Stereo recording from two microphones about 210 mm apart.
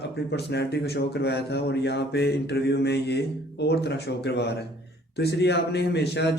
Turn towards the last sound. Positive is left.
turn(degrees=55)  # may be behind; listen again after turning